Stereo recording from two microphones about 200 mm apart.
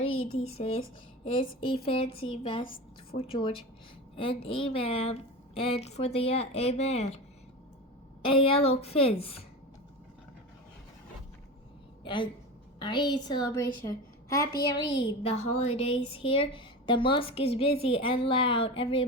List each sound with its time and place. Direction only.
0.0 s a sound: 30° left (ahead or behind)
0.4 s a woman's voice: 30° left (ahead or behind)
2.6 s a woman's voice: 45° left (ahead or behind)
3.2 s a woman's voice: 25° left (ahead or behind)
8.2 s a woman's voice: 25° left (ahead or behind)
12.0 s a woman's voice: 25° left (ahead or behind)